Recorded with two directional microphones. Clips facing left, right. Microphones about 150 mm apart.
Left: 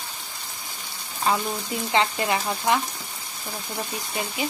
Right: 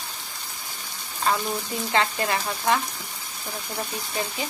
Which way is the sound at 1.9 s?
20° left (ahead or behind).